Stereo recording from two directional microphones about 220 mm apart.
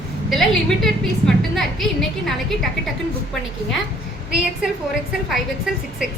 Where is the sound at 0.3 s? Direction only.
Centre (ahead or behind).